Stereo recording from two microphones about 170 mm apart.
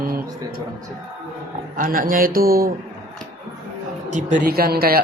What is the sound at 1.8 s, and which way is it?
Speech, 55° right (ahead or behind).